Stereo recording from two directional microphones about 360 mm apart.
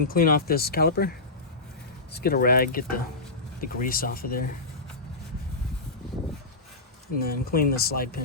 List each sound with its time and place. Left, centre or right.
0.1 s speech: left
2.1 s speech: left
7.2 s speech: left